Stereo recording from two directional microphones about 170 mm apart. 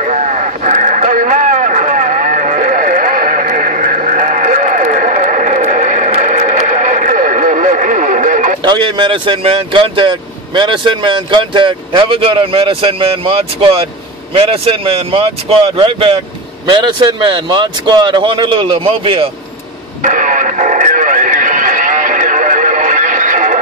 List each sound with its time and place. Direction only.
0.0 s a sound: 45° right (ahead or behind)
6.1 s radio: 45° right (ahead or behind)
8.6 s speech: 25° right (ahead or behind)
20.0 s radio: 50° right (ahead or behind)